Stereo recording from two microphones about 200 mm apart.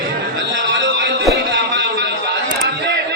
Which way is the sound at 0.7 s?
65° right (ahead or behind).